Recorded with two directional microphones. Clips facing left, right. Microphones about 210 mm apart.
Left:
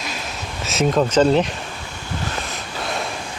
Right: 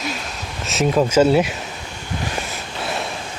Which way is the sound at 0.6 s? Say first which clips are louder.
Right 1 dB; centre (ahead or behind).